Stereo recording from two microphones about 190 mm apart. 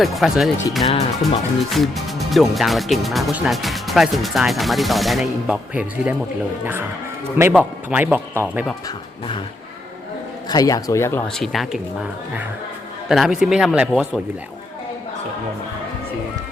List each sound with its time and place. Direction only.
0.0 s speech: centre (ahead or behind)
7.3 s a man's voice: 10° right (ahead or behind)
10.5 s speech: 20° left (ahead or behind)
11.3 s speech: centre (ahead or behind)